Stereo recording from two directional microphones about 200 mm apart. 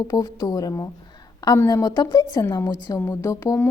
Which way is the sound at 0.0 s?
20° left (ahead or behind).